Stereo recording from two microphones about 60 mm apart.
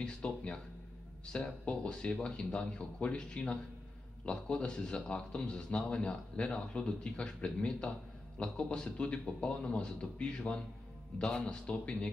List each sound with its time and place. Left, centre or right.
0.0 s speech: centre